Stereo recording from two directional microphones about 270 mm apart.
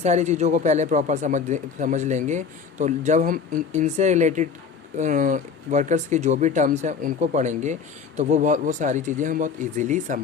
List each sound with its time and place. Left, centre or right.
0.0 s speech: right